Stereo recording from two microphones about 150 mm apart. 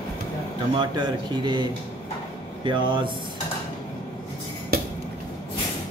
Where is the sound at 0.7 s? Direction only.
30° right (ahead or behind).